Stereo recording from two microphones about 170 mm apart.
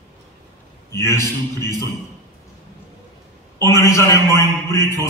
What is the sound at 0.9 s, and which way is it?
Speech, 15° left (ahead or behind).